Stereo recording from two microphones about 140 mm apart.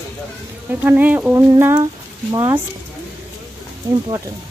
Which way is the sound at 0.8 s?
10° right (ahead or behind).